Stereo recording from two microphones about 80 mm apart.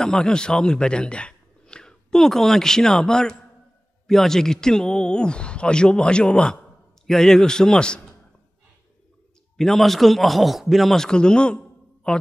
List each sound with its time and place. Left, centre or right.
0.0 s a man's voice: centre
9.6 s a man's voice: centre